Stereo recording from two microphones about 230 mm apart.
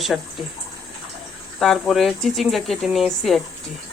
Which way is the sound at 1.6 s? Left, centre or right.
Centre.